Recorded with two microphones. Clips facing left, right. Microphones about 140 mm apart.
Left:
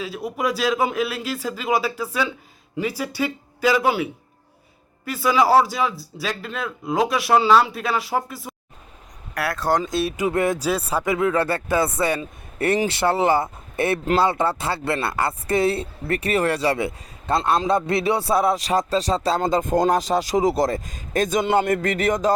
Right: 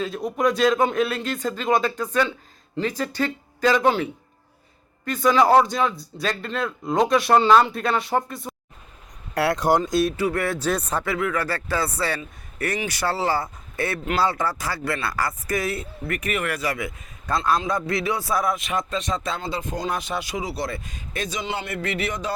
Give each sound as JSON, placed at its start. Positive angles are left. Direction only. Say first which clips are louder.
{"t": 0.0, "sound": "a man's voice", "louder": "right 3 dB", "side_deg": 5}
{"t": 9.3, "sound": "speech", "louder": "right 2 dB", "side_deg": -25}
{"t": 9.8, "sound": "a man's voice", "louder": "right 2 dB", "side_deg": 0}
{"t": 10.2, "sound": "speech", "louder": "left 3 dB", "side_deg": 20}
{"t": 10.7, "sound": "a man's voice", "louder": "left 1 dB", "side_deg": 5}
{"t": 11.0, "sound": "speech", "louder": "left 4 dB", "side_deg": 20}
{"t": 19.4, "sound": "speech", "louder": "left 9 dB", "side_deg": 45}